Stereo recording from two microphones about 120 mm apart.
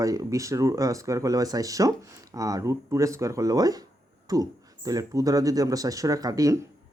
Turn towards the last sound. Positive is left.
turn(degrees=-30)  # may be behind; listen again after turning